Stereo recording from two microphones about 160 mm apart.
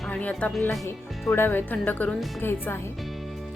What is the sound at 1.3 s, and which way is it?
Speech, 15° left (ahead or behind).